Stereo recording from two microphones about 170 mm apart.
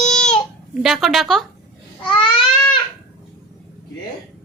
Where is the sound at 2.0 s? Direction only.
30° left (ahead or behind).